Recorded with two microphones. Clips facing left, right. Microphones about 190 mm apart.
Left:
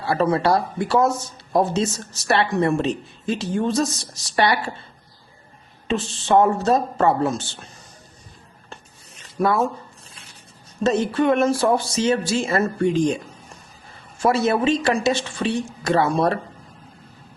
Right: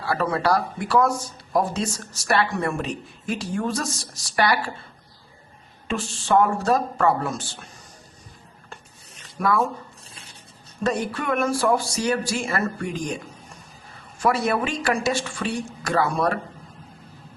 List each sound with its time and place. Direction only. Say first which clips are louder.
0.0 s a woman's voice: left 4 dB; 25° left (ahead or behind)
5.9 s a woman's voice: left 3 dB; 20° left (ahead or behind)
9.4 s a woman's voice: left 2 dB; 25° left (ahead or behind)
10.8 s a woman's voice: left 6 dB; 25° left (ahead or behind)
14.2 s a woman's voice: left 3 dB; 25° left (ahead or behind)